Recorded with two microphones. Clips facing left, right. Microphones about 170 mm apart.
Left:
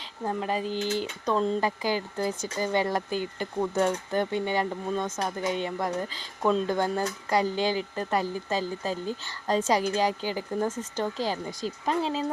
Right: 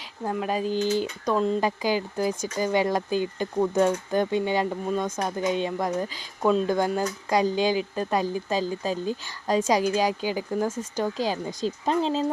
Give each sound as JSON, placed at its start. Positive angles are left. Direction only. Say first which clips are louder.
{"t": 0.4, "sound": "speech", "louder": "right 6 dB", "side_deg": -15}